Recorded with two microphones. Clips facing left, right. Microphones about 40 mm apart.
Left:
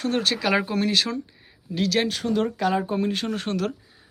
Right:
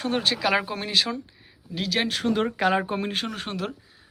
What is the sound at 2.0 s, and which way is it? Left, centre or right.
Speech, right.